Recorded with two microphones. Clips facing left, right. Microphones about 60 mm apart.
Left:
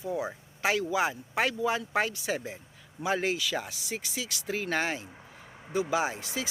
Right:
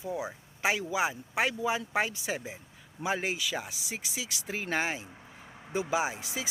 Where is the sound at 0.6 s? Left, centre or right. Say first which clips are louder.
Left 2 dB; centre.